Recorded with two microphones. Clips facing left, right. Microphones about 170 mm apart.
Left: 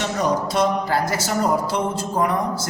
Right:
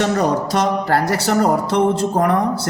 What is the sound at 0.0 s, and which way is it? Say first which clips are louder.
A man's voice: right 4 dB; 60° right (ahead or behind).